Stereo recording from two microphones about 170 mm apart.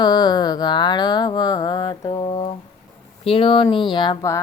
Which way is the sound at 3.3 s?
30° left (ahead or behind).